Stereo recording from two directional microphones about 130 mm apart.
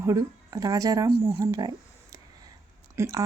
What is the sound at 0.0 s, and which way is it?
Speech, 25° right (ahead or behind).